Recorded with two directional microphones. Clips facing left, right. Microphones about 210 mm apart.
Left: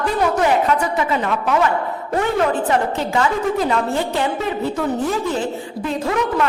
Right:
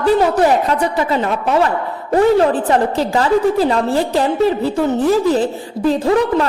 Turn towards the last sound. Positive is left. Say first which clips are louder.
# right 5 dB
turn(degrees=-35)  # may be behind; listen again after turning